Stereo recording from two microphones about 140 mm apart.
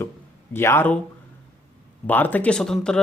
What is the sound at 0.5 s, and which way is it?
Speech, 15° left (ahead or behind).